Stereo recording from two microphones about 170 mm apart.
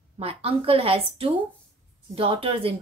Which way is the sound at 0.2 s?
35° right (ahead or behind).